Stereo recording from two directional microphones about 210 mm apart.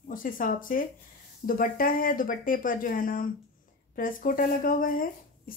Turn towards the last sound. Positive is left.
turn(degrees=40)  # may be behind; listen again after turning